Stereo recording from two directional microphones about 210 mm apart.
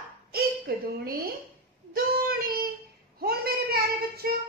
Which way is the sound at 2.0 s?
45° right (ahead or behind).